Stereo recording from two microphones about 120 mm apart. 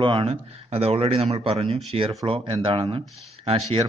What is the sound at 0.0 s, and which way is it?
Speech, 45° right (ahead or behind).